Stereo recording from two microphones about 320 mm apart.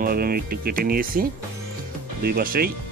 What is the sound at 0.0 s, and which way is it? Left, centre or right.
Speech, right.